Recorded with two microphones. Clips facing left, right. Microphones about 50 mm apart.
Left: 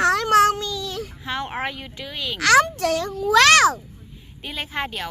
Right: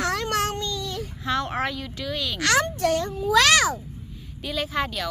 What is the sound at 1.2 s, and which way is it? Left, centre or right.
Speech, centre.